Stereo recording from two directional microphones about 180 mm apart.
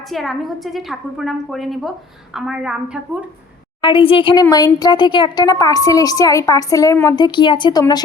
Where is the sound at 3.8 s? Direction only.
30° left (ahead or behind).